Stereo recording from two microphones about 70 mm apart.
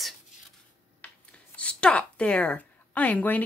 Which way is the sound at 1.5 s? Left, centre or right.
Centre.